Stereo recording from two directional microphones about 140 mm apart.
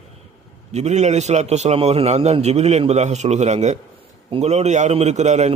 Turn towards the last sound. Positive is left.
turn(degrees=-55)  # may be behind; listen again after turning